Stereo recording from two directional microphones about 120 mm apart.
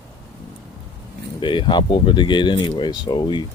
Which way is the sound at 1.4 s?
40° left (ahead or behind).